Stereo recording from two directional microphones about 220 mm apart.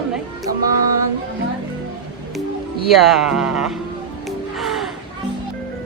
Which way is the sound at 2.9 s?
Centre (ahead or behind).